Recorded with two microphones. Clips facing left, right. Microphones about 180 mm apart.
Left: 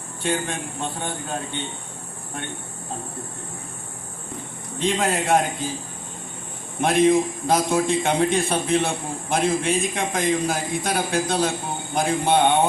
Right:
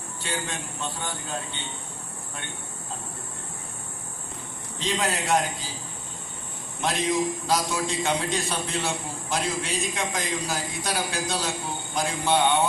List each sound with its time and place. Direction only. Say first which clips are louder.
0.2 s a man's voice: left 7 dB; 50° left (ahead or behind)
4.8 s a man's voice: left 5 dB; 50° left (ahead or behind)
6.8 s a man's voice: left 8 dB; 55° left (ahead or behind)